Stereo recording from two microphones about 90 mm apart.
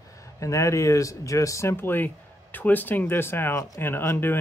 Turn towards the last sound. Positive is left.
turn(degrees=25)  # may be behind; listen again after turning